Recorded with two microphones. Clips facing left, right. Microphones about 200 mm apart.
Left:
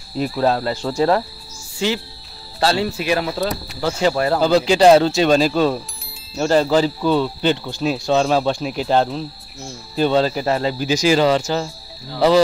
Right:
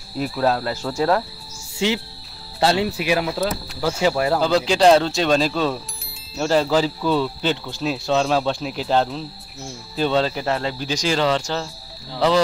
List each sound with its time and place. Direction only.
0.2 s speech: centre (ahead or behind)
1.8 s speech: 20° right (ahead or behind); by 11.7 s 10° left (ahead or behind)